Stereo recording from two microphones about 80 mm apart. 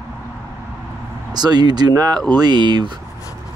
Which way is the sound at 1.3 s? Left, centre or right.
Right.